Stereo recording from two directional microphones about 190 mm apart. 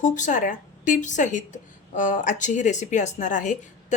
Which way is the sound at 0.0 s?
40° left (ahead or behind).